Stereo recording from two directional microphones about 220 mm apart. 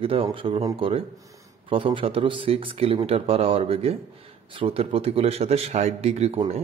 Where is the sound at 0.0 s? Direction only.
25° right (ahead or behind).